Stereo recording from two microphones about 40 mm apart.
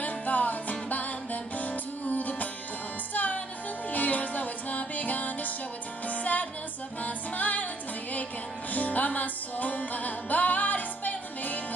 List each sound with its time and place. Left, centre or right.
0.0 s music: left
3.9 s music: left
8.7 s music: left